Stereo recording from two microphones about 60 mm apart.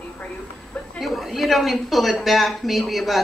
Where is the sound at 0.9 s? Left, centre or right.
Centre.